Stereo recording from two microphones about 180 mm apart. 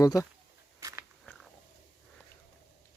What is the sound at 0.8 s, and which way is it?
Biting, 15° right (ahead or behind).